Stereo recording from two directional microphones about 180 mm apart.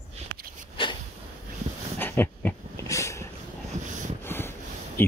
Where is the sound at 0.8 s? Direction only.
30° left (ahead or behind).